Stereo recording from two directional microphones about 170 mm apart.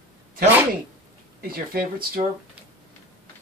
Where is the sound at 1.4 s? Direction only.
60° right (ahead or behind).